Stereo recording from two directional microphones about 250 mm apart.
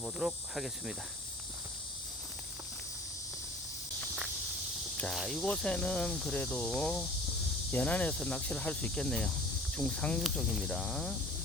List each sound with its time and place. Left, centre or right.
0.0 s speech: centre
4.0 s walk: centre
4.9 s speech: centre